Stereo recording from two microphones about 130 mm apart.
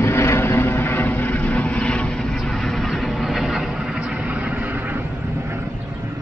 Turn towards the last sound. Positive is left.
turn(degrees=-15)  # may be behind; listen again after turning